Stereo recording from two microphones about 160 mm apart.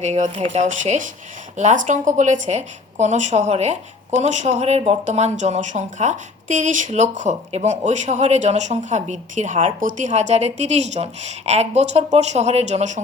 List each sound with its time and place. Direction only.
0.0 s a woman's voice: 45° right (ahead or behind)